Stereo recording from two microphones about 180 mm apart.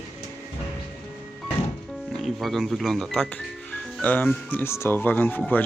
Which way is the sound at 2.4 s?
Centre (ahead or behind).